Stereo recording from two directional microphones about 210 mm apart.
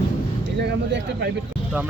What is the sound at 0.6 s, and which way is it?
Speech, 55° right (ahead or behind).